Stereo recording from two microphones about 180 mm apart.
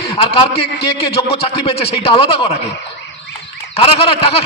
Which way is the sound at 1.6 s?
35° left (ahead or behind).